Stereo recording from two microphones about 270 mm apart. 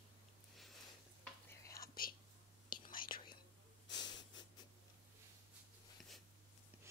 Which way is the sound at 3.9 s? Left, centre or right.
Centre.